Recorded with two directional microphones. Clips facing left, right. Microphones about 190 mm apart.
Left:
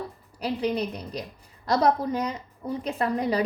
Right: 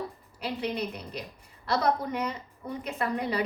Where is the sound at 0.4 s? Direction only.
35° left (ahead or behind).